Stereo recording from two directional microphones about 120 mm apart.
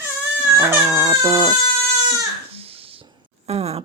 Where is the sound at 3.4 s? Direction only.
60° right (ahead or behind).